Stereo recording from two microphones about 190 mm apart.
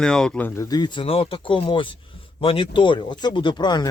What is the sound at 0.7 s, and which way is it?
Speech, 25° left (ahead or behind).